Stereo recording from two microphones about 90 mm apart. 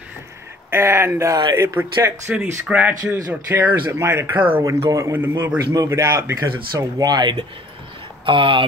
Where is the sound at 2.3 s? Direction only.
15° right (ahead or behind).